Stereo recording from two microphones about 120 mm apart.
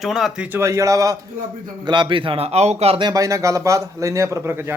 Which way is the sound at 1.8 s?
40° right (ahead or behind).